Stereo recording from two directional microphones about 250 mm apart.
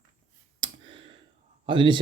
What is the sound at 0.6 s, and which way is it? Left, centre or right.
Clicking, centre.